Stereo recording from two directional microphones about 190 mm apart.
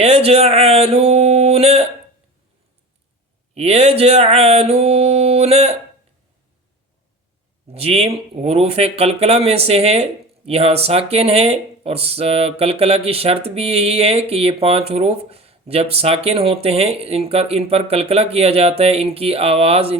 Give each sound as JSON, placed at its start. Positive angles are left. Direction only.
{"t": 0.0, "sound": "speech", "side_deg": -30}
{"t": 3.5, "sound": "speech", "side_deg": -35}
{"t": 7.7, "sound": "speech", "side_deg": -30}